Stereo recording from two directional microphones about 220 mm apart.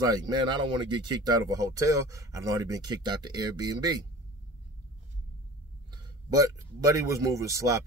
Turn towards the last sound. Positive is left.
turn(degrees=-15)  # may be behind; listen again after turning